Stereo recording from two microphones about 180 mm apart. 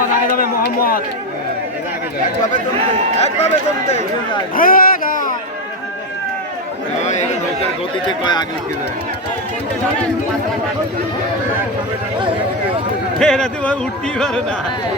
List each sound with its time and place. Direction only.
0.6 s speech: 55° left (ahead or behind)
3.2 s speech: 35° left (ahead or behind)
4.5 s a sound: 50° left (ahead or behind)
7.0 s chatter: 40° left (ahead or behind)
8.0 s speech: 25° left (ahead or behind)
13.1 s speech: 5° left (ahead or behind)